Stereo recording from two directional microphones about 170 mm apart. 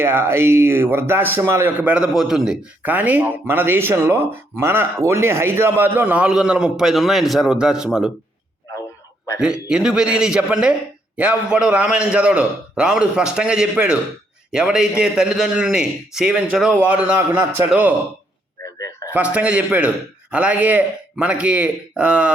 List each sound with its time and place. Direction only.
0.0 s a man's voice: 15° right (ahead or behind)
9.4 s a man's voice: 5° right (ahead or behind)
18.8 s a sound: 15° left (ahead or behind)
19.1 s a man's voice: 10° right (ahead or behind)